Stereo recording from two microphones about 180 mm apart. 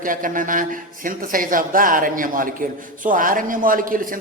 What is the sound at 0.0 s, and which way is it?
A man's voice, 50° right (ahead or behind).